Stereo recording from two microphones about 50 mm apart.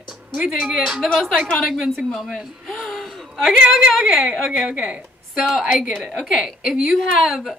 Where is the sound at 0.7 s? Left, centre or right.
Centre.